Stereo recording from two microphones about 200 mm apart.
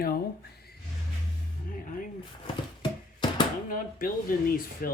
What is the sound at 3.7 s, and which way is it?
Speech, 45° left (ahead or behind).